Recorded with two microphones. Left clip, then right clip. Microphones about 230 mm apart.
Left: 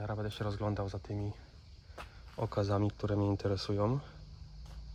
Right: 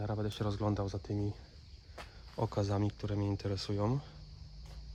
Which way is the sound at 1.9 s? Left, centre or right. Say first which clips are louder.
Right 1 dB; centre.